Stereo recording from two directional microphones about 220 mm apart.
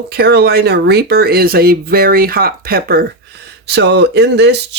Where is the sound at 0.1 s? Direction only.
45° right (ahead or behind).